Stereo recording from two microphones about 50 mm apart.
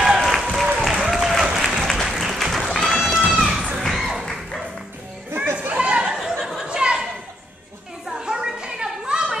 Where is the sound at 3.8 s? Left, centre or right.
Centre.